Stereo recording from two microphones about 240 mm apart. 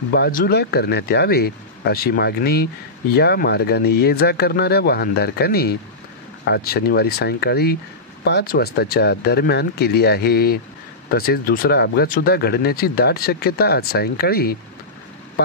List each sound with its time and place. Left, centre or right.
0.1 s speech: left